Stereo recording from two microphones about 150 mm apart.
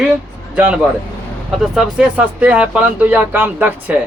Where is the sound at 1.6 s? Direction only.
5° right (ahead or behind).